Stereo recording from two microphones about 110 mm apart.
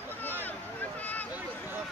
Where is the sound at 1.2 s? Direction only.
15° right (ahead or behind).